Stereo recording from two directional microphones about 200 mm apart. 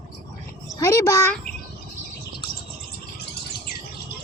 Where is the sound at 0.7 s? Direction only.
15° left (ahead or behind).